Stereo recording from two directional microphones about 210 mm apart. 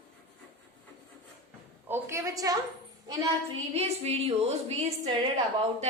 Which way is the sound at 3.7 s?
30° right (ahead or behind).